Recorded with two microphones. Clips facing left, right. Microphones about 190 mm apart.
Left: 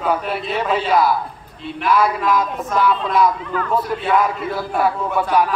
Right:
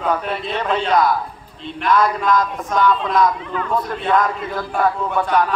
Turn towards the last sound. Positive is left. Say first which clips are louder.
# even
turn(degrees=10)  # may be behind; listen again after turning